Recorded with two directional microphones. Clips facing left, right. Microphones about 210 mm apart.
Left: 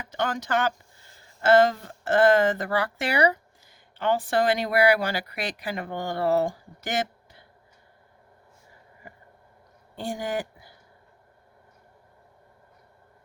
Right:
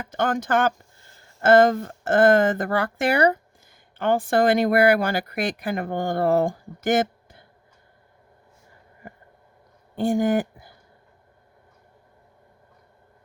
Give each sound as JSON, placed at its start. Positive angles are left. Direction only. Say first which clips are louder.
{"t": 0.0, "sound": "speech", "louder": "right 5 dB", "side_deg": -50}
{"t": 9.9, "sound": "speech", "louder": "right 9 dB", "side_deg": -50}